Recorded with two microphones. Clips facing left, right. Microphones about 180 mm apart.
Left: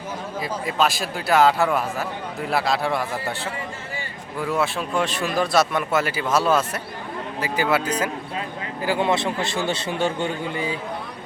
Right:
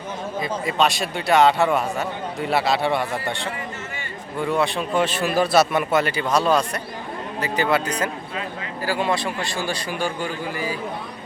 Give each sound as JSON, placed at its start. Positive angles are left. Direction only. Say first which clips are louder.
{"t": 0.3, "sound": "a man's voice", "louder": "right 1 dB", "side_deg": 0}
{"t": 8.8, "sound": "a man's voice", "louder": "left 2 dB", "side_deg": 20}